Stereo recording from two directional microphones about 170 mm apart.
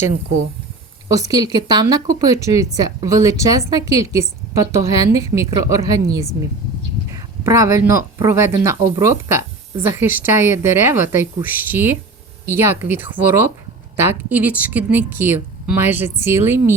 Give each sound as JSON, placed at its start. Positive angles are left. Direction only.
{"t": 1.1, "sound": "a woman's voice", "side_deg": -20}
{"t": 7.1, "sound": "speech", "side_deg": -15}